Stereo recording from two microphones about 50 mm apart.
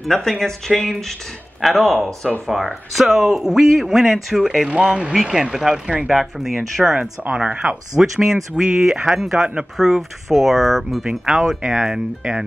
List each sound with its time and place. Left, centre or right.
0.0 s speech: centre
4.6 s speech: centre
7.0 s speech: right
8.0 s speech: centre
11.1 s speech: centre